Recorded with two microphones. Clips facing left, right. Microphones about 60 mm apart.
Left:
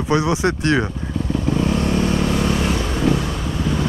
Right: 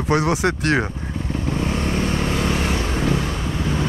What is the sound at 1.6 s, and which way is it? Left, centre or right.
Vehicle, right.